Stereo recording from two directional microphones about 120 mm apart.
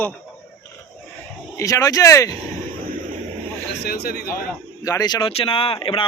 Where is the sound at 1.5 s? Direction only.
25° left (ahead or behind).